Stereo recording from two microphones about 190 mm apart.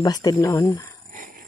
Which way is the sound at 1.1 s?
45° right (ahead or behind).